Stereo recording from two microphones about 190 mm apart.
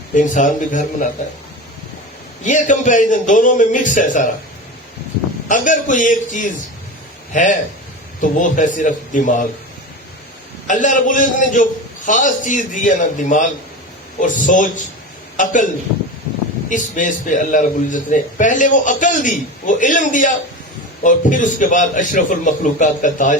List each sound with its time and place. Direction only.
0.1 s a man's voice: 40° left (ahead or behind)
2.4 s a man's voice: 40° left (ahead or behind)
5.5 s a man's voice: 45° left (ahead or behind)
10.7 s a man's voice: 40° left (ahead or behind)
16.6 s a man's voice: 40° left (ahead or behind)